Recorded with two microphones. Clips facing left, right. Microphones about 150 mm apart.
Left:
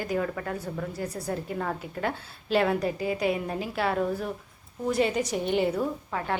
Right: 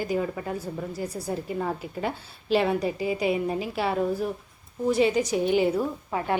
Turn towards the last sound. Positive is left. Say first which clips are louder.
# right 3 dB
turn(degrees=-15)  # may be behind; listen again after turning